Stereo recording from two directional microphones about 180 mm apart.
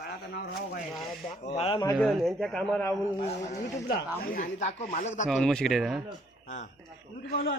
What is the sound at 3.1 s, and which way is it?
Speech, 35° left (ahead or behind).